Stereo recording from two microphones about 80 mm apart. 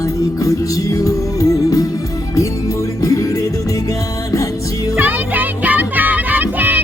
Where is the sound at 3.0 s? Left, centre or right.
Left.